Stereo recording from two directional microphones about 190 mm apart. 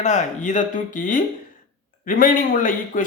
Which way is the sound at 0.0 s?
40° left (ahead or behind).